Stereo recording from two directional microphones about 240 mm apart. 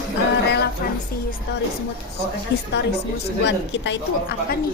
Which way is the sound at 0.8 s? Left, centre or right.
Left.